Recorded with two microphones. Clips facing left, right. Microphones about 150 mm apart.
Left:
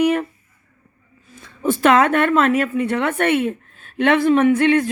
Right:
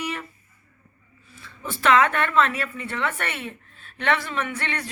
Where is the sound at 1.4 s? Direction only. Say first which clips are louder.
Left 13 dB; 45° left (ahead or behind).